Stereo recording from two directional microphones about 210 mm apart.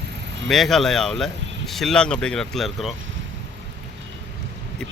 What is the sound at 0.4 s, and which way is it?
A man's voice, centre (ahead or behind).